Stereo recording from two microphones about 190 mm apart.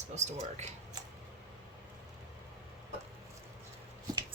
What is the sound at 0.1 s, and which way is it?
Speech, 35° right (ahead or behind).